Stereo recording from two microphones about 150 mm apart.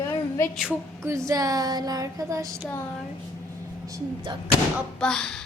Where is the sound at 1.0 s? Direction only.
20° right (ahead or behind).